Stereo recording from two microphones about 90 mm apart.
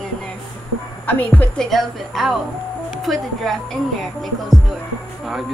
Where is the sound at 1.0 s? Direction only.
20° left (ahead or behind).